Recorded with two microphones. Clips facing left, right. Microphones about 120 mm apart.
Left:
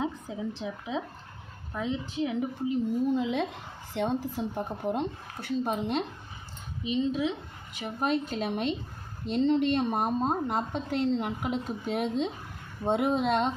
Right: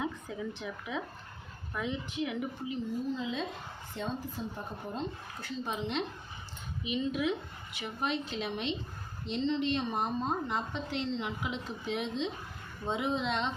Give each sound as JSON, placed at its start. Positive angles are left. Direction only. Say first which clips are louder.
{"t": 0.0, "sound": "a woman's voice", "louder": "left 4 dB", "side_deg": 30}
{"t": 3.1, "sound": "a woman's voice", "louder": "left 7 dB", "side_deg": 65}
{"t": 6.8, "sound": "speech", "louder": "left 4 dB", "side_deg": 30}
{"t": 7.7, "sound": "a woman's voice", "louder": "left 6 dB", "side_deg": 45}